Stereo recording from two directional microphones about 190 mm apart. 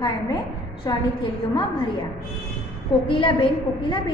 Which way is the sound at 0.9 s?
20° left (ahead or behind).